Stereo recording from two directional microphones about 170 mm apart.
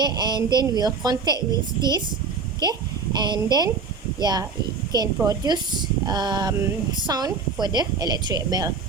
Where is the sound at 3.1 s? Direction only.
25° right (ahead or behind).